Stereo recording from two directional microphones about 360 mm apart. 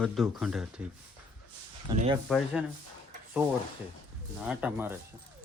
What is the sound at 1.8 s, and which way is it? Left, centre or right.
Speech, centre.